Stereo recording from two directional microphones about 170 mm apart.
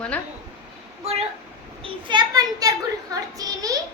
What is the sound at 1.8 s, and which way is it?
A child's voice, 25° right (ahead or behind).